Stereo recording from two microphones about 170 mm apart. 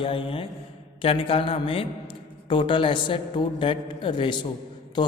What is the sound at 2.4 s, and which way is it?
A man's voice, 30° left (ahead or behind).